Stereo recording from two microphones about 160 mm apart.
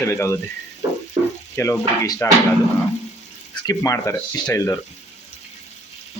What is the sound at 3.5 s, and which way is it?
Speech, 25° left (ahead or behind).